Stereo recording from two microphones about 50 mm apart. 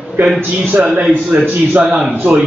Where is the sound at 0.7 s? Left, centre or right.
Right.